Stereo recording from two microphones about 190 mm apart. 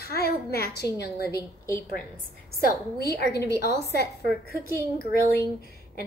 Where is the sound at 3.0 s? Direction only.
60° left (ahead or behind).